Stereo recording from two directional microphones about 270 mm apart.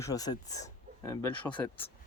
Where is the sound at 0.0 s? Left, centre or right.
Centre.